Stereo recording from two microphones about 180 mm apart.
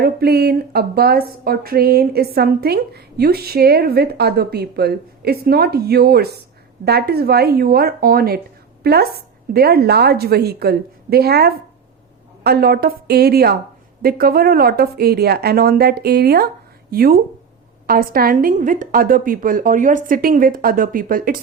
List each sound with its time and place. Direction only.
0.0 s a woman's voice: 60° right (ahead or behind)